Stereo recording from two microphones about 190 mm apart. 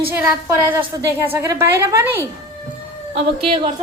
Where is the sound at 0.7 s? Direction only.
15° right (ahead or behind).